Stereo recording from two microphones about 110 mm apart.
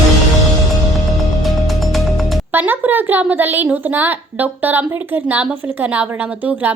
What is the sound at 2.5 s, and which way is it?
A woman's voice, 15° right (ahead or behind).